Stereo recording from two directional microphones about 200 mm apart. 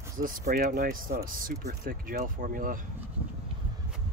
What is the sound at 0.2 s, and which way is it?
Speech, 45° right (ahead or behind).